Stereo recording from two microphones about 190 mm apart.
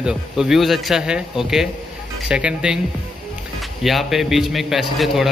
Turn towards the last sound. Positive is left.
turn(degrees=0)  # may be behind; listen again after turning